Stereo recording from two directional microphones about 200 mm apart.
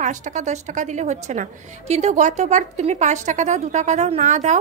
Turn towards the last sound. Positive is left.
turn(degrees=-35)  # may be behind; listen again after turning